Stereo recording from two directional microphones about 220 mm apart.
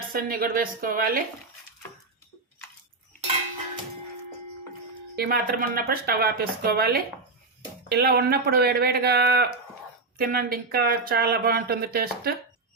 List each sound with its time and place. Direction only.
0.1 s a woman's voice: 40° right (ahead or behind)
5.1 s speech: 45° right (ahead or behind)